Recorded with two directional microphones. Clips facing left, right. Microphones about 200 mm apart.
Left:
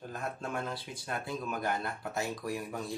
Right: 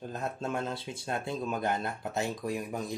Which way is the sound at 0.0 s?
25° right (ahead or behind).